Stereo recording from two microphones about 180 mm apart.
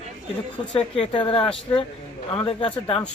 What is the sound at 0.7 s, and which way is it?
Speech, 30° left (ahead or behind).